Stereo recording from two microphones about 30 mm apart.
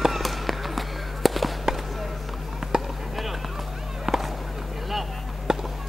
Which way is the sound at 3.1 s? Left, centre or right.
Centre.